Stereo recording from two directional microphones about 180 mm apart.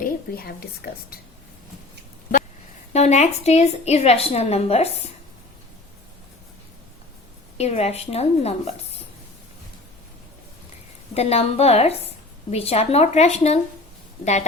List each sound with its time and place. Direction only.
0.0 s a woman's voice: 60° left (ahead or behind)
2.9 s a woman's voice: 40° left (ahead or behind)
7.6 s a woman's voice: 35° left (ahead or behind)
11.1 s a woman's voice: 35° left (ahead or behind)